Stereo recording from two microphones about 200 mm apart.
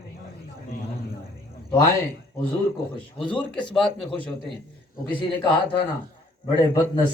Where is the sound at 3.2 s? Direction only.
25° left (ahead or behind).